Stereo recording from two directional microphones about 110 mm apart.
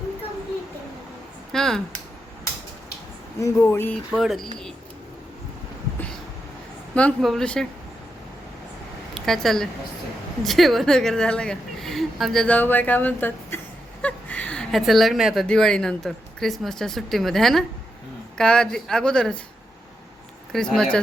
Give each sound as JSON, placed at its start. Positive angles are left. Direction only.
{"t": 1.5, "sound": "speech", "side_deg": 5}
{"t": 3.4, "sound": "speech", "side_deg": 25}
{"t": 4.1, "sound": "speech", "side_deg": 0}
{"t": 7.2, "sound": "speech", "side_deg": 5}
{"t": 9.1, "sound": "speech", "side_deg": 0}
{"t": 12.5, "sound": "speech", "side_deg": 15}
{"t": 14.0, "sound": "a sound", "side_deg": 15}
{"t": 15.4, "sound": "speech", "side_deg": 5}
{"t": 20.5, "sound": "speech", "side_deg": 5}